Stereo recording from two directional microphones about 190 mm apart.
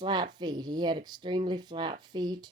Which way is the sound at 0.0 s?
20° right (ahead or behind).